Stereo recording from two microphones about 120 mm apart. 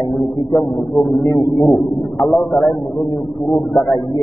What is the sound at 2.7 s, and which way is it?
Speech, 40° left (ahead or behind).